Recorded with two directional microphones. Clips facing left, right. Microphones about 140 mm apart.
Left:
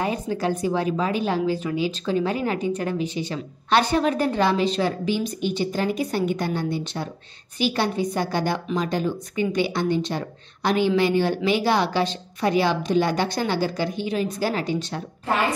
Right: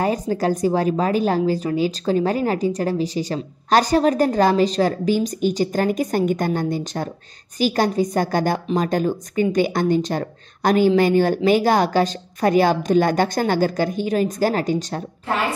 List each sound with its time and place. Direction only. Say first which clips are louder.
0.0 s a woman's voice: right 4 dB; 40° right (ahead or behind)